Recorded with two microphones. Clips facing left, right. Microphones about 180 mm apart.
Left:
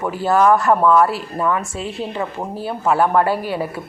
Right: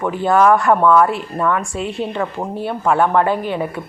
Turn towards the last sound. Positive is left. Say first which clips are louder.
# right 1 dB
turn(degrees=5)  # may be behind; listen again after turning